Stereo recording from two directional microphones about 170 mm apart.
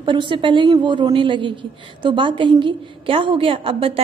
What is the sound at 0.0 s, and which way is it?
A woman's voice, 30° right (ahead or behind).